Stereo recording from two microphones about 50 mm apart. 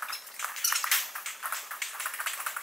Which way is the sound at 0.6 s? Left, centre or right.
Centre.